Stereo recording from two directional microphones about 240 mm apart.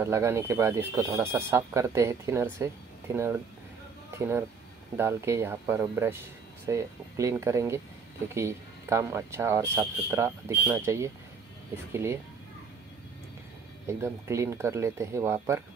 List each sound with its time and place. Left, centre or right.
0.0 s speech: centre
13.8 s speech: centre